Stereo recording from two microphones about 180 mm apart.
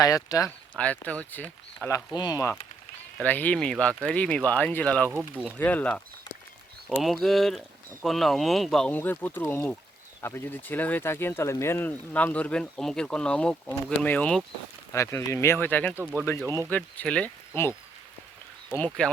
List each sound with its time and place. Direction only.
0.0 s speech: 20° left (ahead or behind)
0.8 s speech: 5° left (ahead or behind)
2.1 s speech: 20° left (ahead or behind)
18.9 s speech: 5° left (ahead or behind)